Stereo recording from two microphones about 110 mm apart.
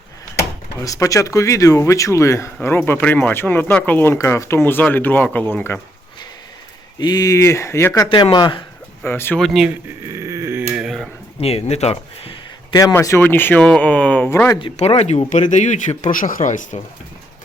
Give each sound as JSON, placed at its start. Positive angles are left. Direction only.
{"t": 0.8, "sound": "speech", "side_deg": 30}
{"t": 7.0, "sound": "speech", "side_deg": 35}
{"t": 8.1, "sound": "speech", "side_deg": 45}
{"t": 9.0, "sound": "speech", "side_deg": 20}
{"t": 9.4, "sound": "speech", "side_deg": 0}
{"t": 10.1, "sound": "dog", "side_deg": -25}
{"t": 10.6, "sound": "a sound", "side_deg": -10}
{"t": 11.3, "sound": "speech", "side_deg": 65}
{"t": 12.9, "sound": "speech", "side_deg": 25}
{"t": 14.8, "sound": "speech", "side_deg": 75}
{"t": 15.3, "sound": "speech", "side_deg": 90}